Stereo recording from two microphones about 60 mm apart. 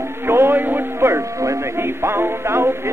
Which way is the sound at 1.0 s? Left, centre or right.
Right.